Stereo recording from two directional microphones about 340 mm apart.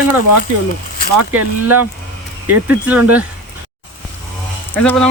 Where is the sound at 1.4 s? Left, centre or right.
Right.